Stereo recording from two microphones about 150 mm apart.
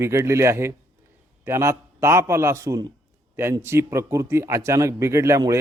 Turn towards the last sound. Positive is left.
turn(degrees=-20)  # may be behind; listen again after turning